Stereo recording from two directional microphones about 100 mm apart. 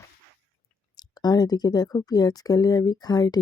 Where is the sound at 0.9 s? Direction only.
40° left (ahead or behind).